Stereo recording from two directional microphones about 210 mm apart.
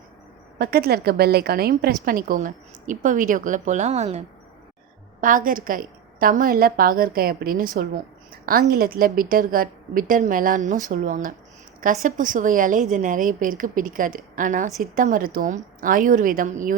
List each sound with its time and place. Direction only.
0.6 s a woman's voice: 45° right (ahead or behind)
5.2 s a woman's voice: 40° right (ahead or behind)